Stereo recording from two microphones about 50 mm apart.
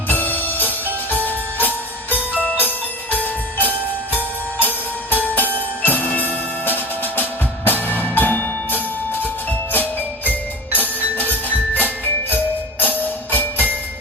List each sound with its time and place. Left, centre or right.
0.1 s music: left